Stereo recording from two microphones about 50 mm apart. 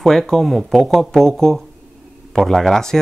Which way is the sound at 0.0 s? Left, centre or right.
Centre.